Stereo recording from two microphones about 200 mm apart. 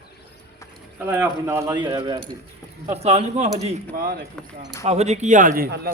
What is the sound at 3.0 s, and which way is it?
Speech, 35° right (ahead or behind).